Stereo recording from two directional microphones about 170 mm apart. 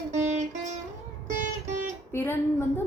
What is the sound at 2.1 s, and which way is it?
Speech, 15° left (ahead or behind).